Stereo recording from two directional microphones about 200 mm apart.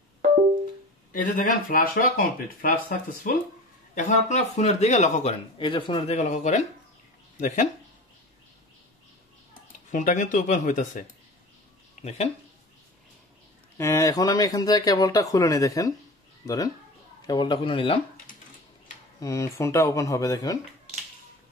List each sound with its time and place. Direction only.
1.1 s speech: 45° left (ahead or behind)
5.6 s speech: 25° left (ahead or behind)
9.8 s speech: 40° left (ahead or behind)
13.7 s a man's voice: 15° left (ahead or behind)
19.1 s speech: 15° left (ahead or behind)